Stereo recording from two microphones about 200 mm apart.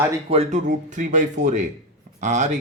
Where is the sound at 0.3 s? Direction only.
35° right (ahead or behind).